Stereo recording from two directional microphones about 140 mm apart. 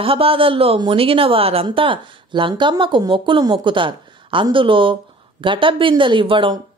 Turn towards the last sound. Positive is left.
turn(degrees=-35)  # may be behind; listen again after turning